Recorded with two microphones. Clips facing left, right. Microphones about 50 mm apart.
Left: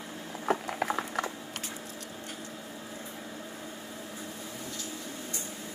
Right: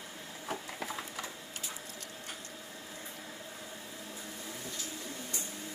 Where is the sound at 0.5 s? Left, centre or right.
Left.